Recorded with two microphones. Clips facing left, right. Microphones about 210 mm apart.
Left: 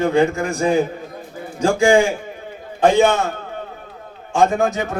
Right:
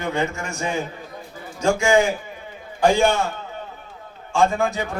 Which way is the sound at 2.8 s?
20° left (ahead or behind).